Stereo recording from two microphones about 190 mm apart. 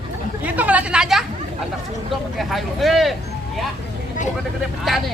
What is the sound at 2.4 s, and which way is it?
Speech, centre (ahead or behind).